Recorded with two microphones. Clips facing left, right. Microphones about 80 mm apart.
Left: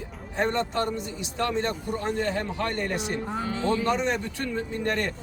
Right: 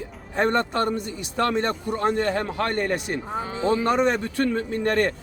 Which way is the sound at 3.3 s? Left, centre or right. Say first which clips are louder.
Right 4 dB; right.